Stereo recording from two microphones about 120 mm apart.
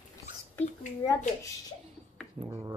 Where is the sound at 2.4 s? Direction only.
30° right (ahead or behind).